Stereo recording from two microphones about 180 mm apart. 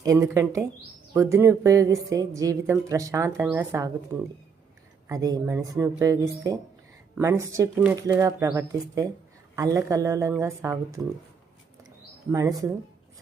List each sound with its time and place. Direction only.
0.0 s a woman's voice: 20° right (ahead or behind)
12.3 s speech: 20° right (ahead or behind)